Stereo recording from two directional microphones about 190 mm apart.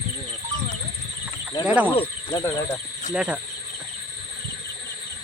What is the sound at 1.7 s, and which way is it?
Speech, 10° right (ahead or behind).